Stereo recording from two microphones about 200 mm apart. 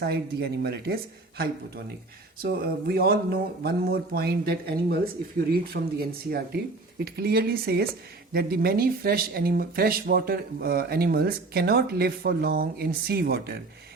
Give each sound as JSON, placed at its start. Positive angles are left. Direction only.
{"t": 0.0, "sound": "speech", "side_deg": -55}
{"t": 2.4, "sound": "speech", "side_deg": -50}